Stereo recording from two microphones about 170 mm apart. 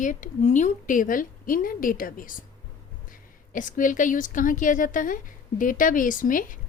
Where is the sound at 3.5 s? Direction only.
50° left (ahead or behind).